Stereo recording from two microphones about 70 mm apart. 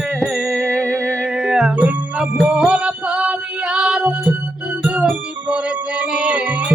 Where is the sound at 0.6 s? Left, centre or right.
Right.